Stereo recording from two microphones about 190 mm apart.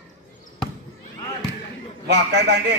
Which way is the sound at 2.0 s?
65° right (ahead or behind).